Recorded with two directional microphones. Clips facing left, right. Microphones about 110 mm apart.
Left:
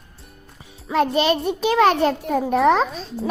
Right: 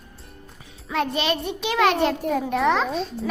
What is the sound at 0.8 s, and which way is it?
A child's voice, 35° left (ahead or behind).